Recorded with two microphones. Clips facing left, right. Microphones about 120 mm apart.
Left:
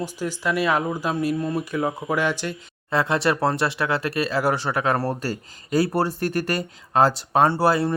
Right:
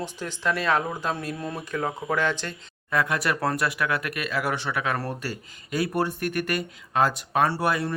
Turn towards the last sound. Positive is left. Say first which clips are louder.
# left 5 dB
turn(degrees=30)  # may be behind; listen again after turning